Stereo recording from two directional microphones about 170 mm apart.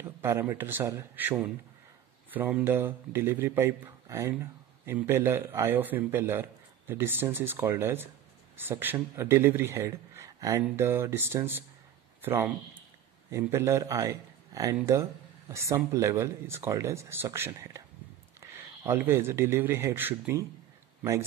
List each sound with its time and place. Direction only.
0.0 s speech: 15° right (ahead or behind)